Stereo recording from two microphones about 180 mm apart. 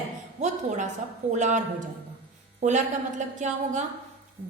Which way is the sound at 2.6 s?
45° right (ahead or behind).